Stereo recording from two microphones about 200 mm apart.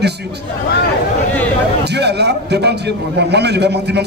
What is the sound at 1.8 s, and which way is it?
A man's voice, 55° right (ahead or behind).